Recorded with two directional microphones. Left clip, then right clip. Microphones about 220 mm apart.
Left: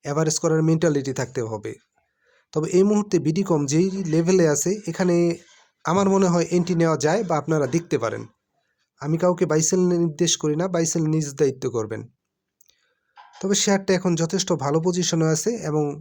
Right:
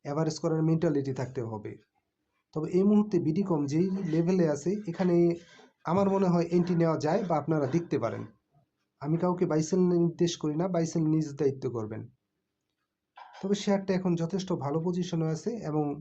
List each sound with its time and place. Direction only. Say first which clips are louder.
0.0 s speech: left 8 dB; 40° left (ahead or behind)
13.4 s speech: left 8 dB; 50° left (ahead or behind)